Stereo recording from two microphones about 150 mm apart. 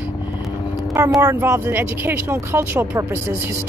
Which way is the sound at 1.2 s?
15° right (ahead or behind).